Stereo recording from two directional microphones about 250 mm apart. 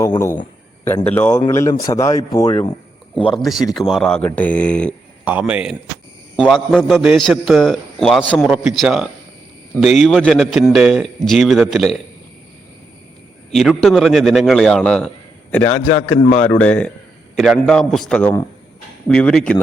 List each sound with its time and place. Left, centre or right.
0.0 s a man's voice: centre
3.7 s a man's voice: centre
5.2 s a man's voice: centre
13.5 s a man's voice: centre
15.7 s a man's voice: left
16.3 s a man's voice: centre